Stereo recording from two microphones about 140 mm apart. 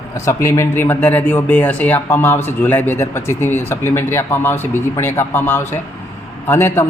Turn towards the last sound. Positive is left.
turn(degrees=15)  # may be behind; listen again after turning